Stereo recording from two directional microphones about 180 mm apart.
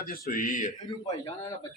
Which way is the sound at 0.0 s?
55° left (ahead or behind).